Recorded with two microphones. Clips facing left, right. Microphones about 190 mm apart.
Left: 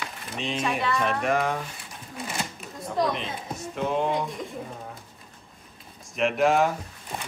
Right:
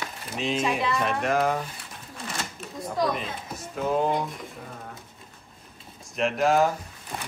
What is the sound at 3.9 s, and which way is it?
Speech, 5° right (ahead or behind).